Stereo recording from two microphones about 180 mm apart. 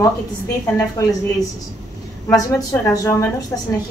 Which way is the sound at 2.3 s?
20° left (ahead or behind).